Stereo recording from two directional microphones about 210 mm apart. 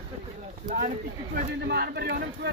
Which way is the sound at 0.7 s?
45° right (ahead or behind).